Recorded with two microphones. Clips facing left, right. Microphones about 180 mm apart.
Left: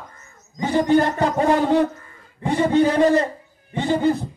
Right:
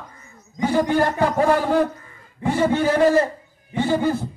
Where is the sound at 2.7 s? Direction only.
15° left (ahead or behind).